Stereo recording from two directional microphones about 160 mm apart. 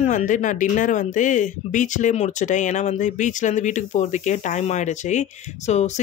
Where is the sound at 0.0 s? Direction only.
50° left (ahead or behind).